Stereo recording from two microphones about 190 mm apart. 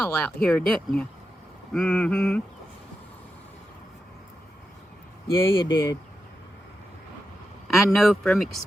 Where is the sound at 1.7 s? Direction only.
5° left (ahead or behind).